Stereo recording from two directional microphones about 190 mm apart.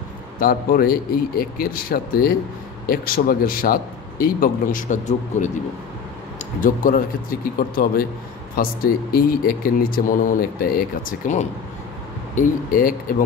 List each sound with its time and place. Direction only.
0.4 s speech: 50° left (ahead or behind)
6.6 s speech: 45° left (ahead or behind)